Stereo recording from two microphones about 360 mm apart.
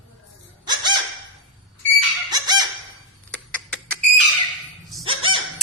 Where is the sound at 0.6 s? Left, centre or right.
Centre.